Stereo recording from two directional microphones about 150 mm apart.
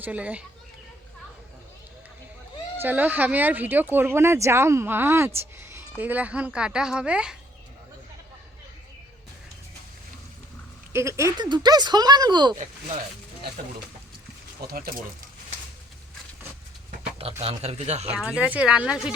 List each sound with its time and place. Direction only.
0.0 s speech: 10° right (ahead or behind)
2.8 s speech: 10° right (ahead or behind)
5.4 s music: 15° right (ahead or behind)
6.0 s speech: 10° right (ahead or behind)
10.9 s speech: 20° right (ahead or behind)
14.6 s speech: 80° right
16.9 s a sound: 45° right (ahead or behind)
17.4 s a man's voice: 45° right (ahead or behind)
18.1 s speech: 5° right (ahead or behind)